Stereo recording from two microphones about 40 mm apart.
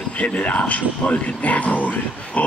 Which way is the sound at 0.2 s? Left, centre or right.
Left.